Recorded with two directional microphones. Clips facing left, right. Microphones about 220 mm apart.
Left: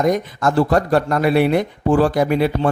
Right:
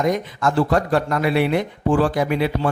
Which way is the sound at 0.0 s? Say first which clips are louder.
Left 3 dB; 40° left (ahead or behind).